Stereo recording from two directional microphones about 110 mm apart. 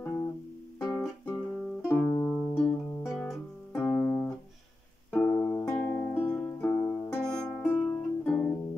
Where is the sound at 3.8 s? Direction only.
20° left (ahead or behind).